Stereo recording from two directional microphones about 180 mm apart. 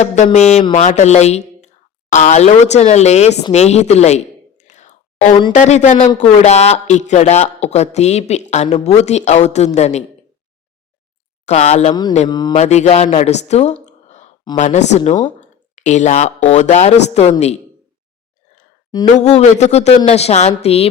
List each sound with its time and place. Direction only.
0.3 s speech: 40° left (ahead or behind)
3.5 s a sound: 40° left (ahead or behind)
5.5 s speech: 40° left (ahead or behind)
11.4 s speech: 40° left (ahead or behind)
12.3 s mantra: 25° left (ahead or behind)
12.5 s speech: 40° left (ahead or behind)
14.1 s a sound: 40° left (ahead or behind)
14.4 s speech: 35° left (ahead or behind)
19.2 s speech: 40° left (ahead or behind)